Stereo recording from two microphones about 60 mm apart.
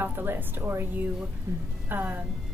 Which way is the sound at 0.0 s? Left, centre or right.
Right.